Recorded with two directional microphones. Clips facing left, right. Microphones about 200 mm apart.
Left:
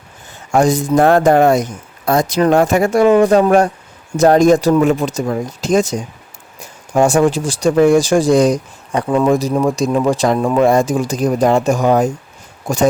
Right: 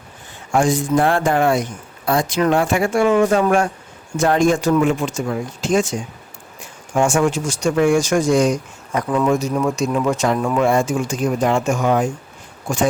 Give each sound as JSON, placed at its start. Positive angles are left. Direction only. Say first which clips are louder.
{"t": 0.5, "sound": "speech", "louder": "left 4 dB", "side_deg": 40}